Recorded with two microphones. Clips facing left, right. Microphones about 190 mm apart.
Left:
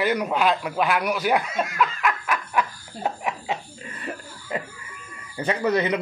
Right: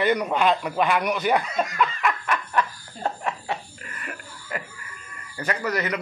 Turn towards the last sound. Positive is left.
turn(degrees=25)  # may be behind; listen again after turning